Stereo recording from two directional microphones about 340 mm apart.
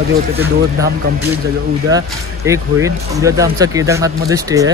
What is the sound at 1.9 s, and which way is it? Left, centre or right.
A man's voice, centre.